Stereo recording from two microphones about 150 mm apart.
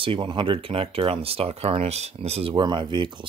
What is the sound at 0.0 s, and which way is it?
Speech, 35° right (ahead or behind).